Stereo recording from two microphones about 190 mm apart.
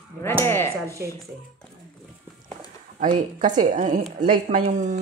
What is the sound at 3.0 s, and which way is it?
A woman's voice, 45° right (ahead or behind).